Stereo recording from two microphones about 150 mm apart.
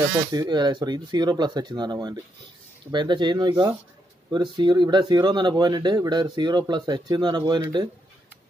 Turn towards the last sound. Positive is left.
turn(degrees=-30)  # may be behind; listen again after turning